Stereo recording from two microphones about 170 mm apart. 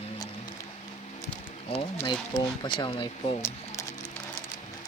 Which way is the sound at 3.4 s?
15° left (ahead or behind).